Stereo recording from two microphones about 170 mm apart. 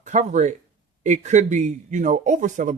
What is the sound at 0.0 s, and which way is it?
Speech, 45° right (ahead or behind).